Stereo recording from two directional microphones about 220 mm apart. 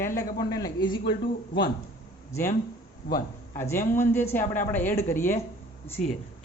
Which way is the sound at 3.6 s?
10° left (ahead or behind).